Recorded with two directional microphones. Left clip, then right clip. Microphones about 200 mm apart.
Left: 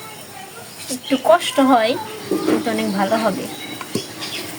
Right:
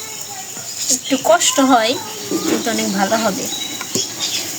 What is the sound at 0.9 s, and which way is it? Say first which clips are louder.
Speech: right 1 dB; 10° left (ahead or behind).